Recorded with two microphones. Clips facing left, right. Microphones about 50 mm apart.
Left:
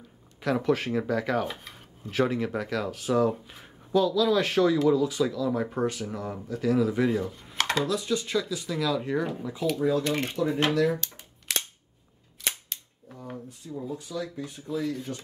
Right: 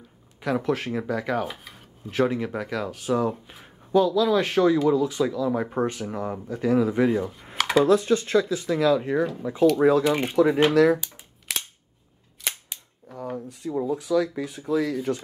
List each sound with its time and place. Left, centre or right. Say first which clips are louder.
0.4 s speech: even; centre
7.5 s computer keyboard: right 6 dB; centre
7.8 s speech: right 8 dB; right
9.8 s speech: right 7 dB; right
10.0 s speech: right 5 dB; centre
10.7 s speech: right 6 dB; right
11.0 s computer keyboard: even; centre
13.5 s speech: right 10 dB; right